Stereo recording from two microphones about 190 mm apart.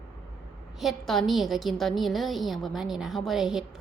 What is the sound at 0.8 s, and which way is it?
A woman's voice, centre (ahead or behind).